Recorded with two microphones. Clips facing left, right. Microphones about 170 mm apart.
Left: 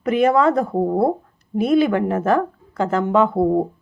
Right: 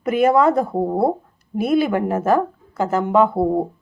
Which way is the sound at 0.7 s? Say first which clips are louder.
Left 1 dB; 5° right (ahead or behind).